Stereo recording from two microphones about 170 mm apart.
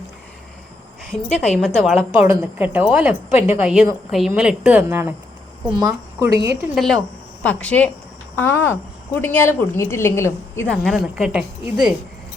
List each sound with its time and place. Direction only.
1.1 s a woman's voice: centre (ahead or behind)
2.0 s a woman's voice: 10° right (ahead or behind)
6.1 s a woman's voice: 15° right (ahead or behind)
6.7 s a woman's voice: centre (ahead or behind)